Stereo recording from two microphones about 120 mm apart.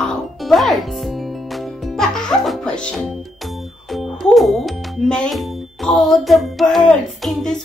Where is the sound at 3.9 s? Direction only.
Centre (ahead or behind).